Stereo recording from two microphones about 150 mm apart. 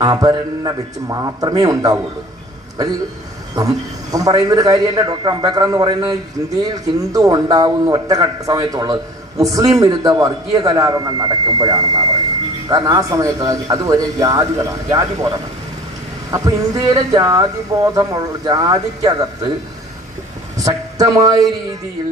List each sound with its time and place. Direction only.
0.0 s a man's voice: 25° right (ahead or behind)
3.5 s a man's voice: 25° right (ahead or behind)
20.5 s speech: 25° right (ahead or behind)